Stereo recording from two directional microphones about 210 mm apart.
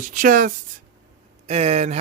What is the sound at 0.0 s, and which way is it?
Speech, 40° right (ahead or behind).